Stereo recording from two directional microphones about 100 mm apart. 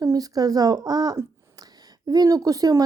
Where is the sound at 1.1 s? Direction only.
40° right (ahead or behind).